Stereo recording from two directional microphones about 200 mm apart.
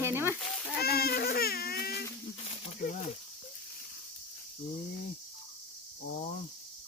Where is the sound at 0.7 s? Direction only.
50° left (ahead or behind).